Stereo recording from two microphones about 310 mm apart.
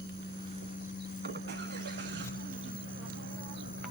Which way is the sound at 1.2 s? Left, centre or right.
Right.